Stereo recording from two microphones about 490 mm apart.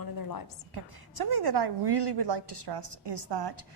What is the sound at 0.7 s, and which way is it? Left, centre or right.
A woman's voice, right.